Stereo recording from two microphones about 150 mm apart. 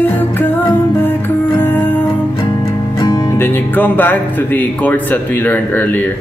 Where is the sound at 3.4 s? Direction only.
15° left (ahead or behind).